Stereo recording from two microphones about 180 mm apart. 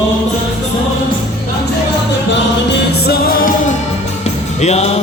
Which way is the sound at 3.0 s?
55° left (ahead or behind).